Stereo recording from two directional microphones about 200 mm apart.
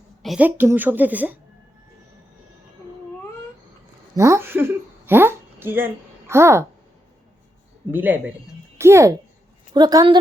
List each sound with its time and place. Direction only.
0.2 s a woman's voice: 5° right (ahead or behind)
4.1 s speech: 15° right (ahead or behind)
7.9 s a woman's voice: 10° right (ahead or behind)